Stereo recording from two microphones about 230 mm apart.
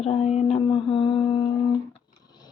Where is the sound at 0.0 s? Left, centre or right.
Left.